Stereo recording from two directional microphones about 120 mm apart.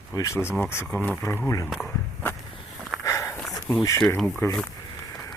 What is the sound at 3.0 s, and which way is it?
Walk, 25° left (ahead or behind).